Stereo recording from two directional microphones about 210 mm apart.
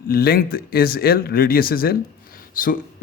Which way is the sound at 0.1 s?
45° left (ahead or behind).